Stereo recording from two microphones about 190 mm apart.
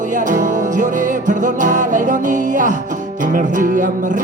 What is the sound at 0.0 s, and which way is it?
Music, 40° right (ahead or behind).